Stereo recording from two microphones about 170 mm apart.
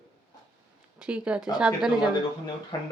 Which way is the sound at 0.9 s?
5° right (ahead or behind).